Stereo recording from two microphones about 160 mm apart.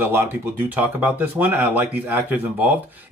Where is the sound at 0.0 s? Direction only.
15° right (ahead or behind).